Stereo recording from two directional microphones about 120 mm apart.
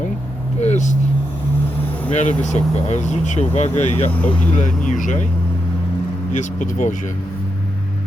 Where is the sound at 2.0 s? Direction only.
80° left.